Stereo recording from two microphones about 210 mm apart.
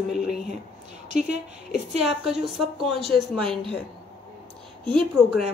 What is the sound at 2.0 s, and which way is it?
Speech, centre (ahead or behind).